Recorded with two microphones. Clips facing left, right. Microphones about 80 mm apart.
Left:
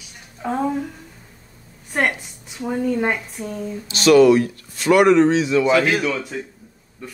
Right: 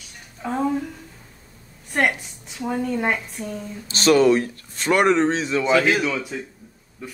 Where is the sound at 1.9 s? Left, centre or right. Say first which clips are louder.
Even; centre.